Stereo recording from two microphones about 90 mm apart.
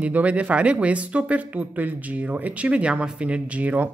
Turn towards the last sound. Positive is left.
turn(degrees=-15)  # may be behind; listen again after turning